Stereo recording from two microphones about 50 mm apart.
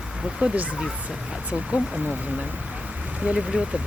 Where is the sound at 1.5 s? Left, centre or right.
Centre.